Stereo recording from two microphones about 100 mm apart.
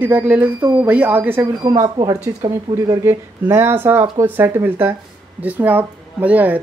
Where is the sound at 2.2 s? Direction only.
40° right (ahead or behind).